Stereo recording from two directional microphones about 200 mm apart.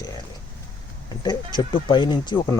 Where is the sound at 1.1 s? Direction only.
20° left (ahead or behind).